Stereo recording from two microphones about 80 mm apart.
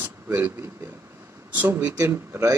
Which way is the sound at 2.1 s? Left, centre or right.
Right.